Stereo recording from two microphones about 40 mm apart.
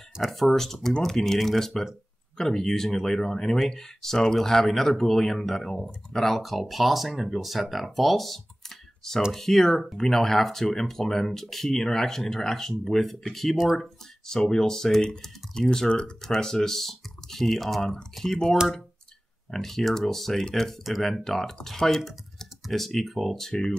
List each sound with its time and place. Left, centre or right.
0.3 s speech: centre
23.5 s speech: left